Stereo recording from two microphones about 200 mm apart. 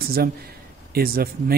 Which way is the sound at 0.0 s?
50° right (ahead or behind).